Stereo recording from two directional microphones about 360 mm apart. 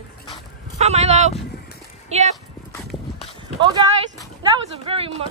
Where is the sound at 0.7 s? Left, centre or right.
Centre.